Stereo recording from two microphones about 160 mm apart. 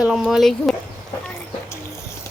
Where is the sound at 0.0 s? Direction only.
Centre (ahead or behind).